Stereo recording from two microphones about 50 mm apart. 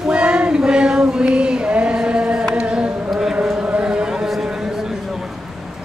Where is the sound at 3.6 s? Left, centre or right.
Right; by 4.5 s centre.